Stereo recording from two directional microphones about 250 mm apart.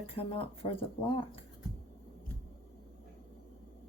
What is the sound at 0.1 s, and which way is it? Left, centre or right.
Speech, left.